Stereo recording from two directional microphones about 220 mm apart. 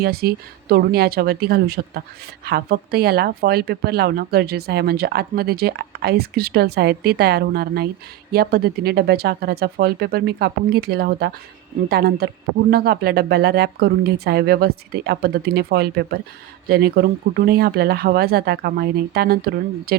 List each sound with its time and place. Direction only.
0.0 s speech: 45° right (ahead or behind)